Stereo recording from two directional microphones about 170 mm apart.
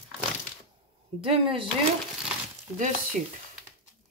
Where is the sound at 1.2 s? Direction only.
30° right (ahead or behind).